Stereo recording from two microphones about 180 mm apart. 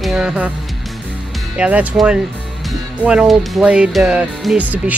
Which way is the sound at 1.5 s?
5° right (ahead or behind).